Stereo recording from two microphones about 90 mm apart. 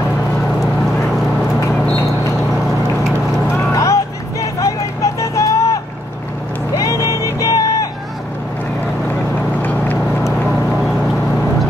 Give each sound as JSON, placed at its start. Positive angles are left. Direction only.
{"t": 3.5, "sound": "vehicle", "side_deg": 35}
{"t": 6.8, "sound": "vehicle", "side_deg": 35}
{"t": 9.6, "sound": "vehicle", "side_deg": 20}